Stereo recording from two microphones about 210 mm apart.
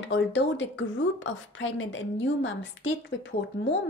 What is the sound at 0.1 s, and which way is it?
A woman's voice, 60° left (ahead or behind).